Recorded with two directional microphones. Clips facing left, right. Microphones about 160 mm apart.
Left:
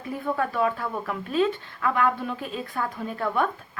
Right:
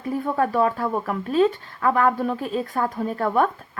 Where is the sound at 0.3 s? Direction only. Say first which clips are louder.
Right 5 dB; 40° right (ahead or behind).